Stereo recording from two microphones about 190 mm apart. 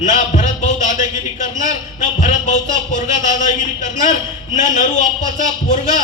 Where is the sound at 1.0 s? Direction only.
40° left (ahead or behind).